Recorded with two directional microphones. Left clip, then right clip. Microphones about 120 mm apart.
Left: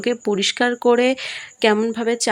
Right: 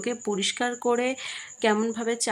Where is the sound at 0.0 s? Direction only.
30° left (ahead or behind).